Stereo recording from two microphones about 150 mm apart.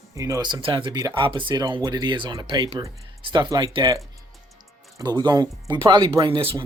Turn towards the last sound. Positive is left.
turn(degrees=-35)  # may be behind; listen again after turning